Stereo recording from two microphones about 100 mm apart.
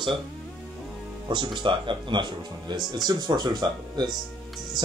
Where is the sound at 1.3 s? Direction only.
55° right (ahead or behind).